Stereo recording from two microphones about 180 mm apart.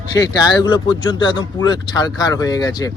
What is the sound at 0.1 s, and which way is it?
Speech, 20° left (ahead or behind).